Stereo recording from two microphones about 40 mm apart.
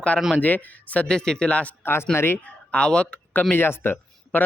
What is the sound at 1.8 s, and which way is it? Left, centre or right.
Speech, left.